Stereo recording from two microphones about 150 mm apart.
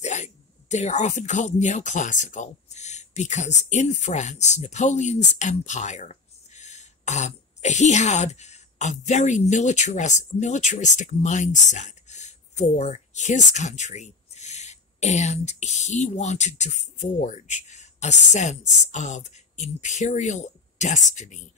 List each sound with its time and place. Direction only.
0.0 s speech: 50° left (ahead or behind)